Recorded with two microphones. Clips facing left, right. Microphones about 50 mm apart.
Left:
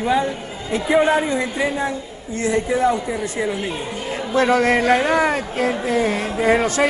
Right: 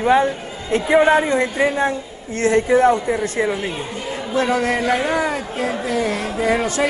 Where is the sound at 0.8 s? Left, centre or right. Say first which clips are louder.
Right 2 dB; right.